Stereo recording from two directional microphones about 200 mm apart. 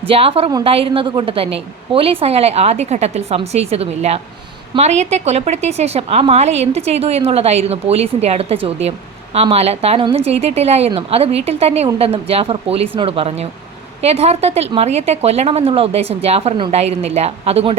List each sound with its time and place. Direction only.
0.1 s a woman's voice: 30° right (ahead or behind)